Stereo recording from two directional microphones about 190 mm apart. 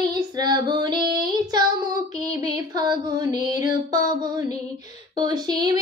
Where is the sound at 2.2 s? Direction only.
40° left (ahead or behind).